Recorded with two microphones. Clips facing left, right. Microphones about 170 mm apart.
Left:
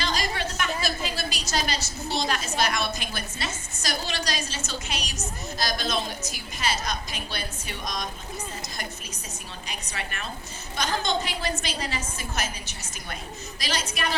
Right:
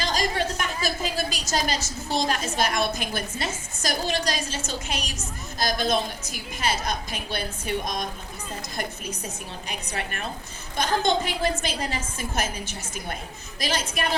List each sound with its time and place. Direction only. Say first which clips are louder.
0.0 s a woman's voice: right 3 dB; 45° right (ahead or behind)
9.6 s a woman's voice: right 4 dB; 50° right (ahead or behind)